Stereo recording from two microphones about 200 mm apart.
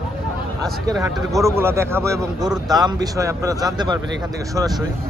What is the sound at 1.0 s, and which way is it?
A man's voice, 15° right (ahead or behind).